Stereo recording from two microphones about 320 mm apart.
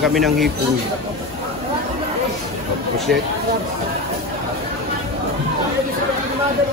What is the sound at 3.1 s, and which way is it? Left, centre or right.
Speech, right.